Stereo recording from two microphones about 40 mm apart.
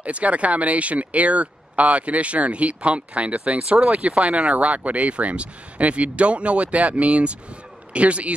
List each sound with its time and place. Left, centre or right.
0.0 s speech: right